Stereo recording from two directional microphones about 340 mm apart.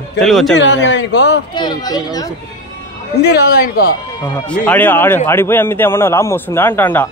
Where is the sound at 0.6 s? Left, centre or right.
Left.